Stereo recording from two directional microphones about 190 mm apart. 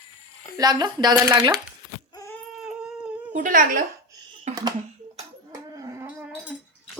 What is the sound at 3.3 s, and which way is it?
Speech, 45° right (ahead or behind).